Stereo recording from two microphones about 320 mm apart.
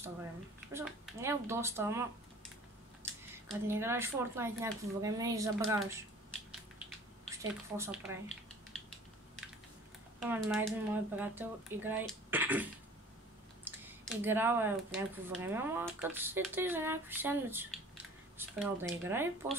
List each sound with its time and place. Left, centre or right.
0.7 s speech: centre
7.2 s speech: centre
10.2 s speech: centre
13.7 s speech: centre